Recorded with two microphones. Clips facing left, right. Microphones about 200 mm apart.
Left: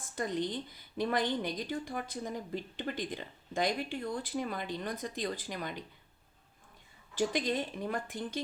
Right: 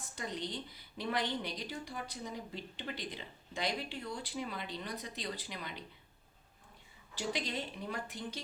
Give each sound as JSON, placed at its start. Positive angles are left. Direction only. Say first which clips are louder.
{"t": 0.2, "sound": "a woman's voice", "louder": "left 7 dB", "side_deg": 50}
{"t": 7.2, "sound": "a woman's voice", "louder": "left 7 dB", "side_deg": 50}